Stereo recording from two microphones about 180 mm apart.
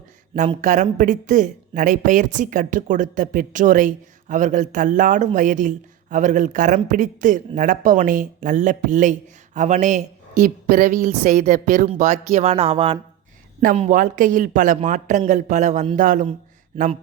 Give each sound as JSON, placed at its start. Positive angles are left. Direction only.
{"t": 0.3, "sound": "speech", "side_deg": -45}
{"t": 13.7, "sound": "speech", "side_deg": -45}